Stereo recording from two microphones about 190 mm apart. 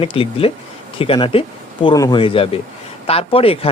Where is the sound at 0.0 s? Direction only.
30° left (ahead or behind).